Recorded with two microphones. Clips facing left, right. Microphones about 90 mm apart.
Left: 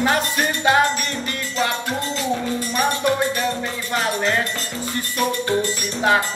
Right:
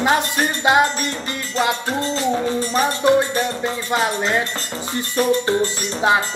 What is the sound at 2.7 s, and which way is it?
Music, 30° right (ahead or behind).